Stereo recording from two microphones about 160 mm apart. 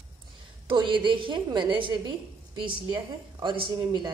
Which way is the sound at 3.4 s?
30° right (ahead or behind).